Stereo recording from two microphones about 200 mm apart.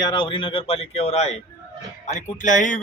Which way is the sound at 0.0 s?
25° left (ahead or behind).